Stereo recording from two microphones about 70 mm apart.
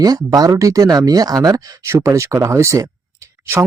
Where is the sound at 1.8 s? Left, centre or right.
Right.